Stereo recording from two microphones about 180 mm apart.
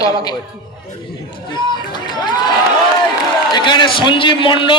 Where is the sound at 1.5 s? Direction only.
25° left (ahead or behind).